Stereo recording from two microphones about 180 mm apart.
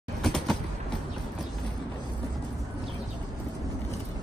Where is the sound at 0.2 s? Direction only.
Centre (ahead or behind).